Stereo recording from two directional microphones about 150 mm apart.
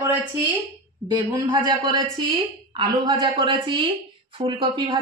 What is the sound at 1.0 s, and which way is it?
Speech, 30° right (ahead or behind).